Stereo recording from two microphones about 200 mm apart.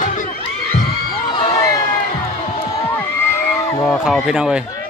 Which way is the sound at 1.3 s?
15° left (ahead or behind).